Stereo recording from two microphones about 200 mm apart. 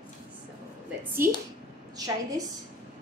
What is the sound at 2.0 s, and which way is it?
Speech, 20° right (ahead or behind).